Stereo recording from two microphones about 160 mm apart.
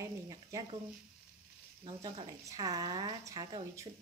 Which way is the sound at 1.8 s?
30° right (ahead or behind).